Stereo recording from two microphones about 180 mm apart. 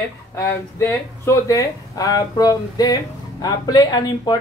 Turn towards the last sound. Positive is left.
turn(degrees=20)  # may be behind; listen again after turning